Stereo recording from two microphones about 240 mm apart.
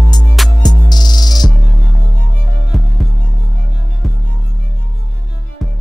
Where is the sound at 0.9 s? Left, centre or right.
Centre.